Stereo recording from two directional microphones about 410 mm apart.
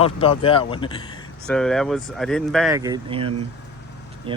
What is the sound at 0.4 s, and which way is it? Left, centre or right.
Speech, centre.